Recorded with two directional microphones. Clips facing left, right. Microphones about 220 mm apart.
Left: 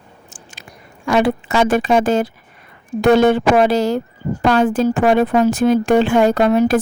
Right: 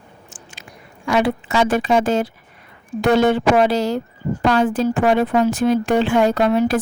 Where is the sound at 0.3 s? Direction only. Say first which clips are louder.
Left 1 dB; 40° left (ahead or behind).